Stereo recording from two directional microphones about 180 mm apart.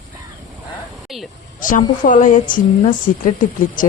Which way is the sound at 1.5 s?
45° left (ahead or behind).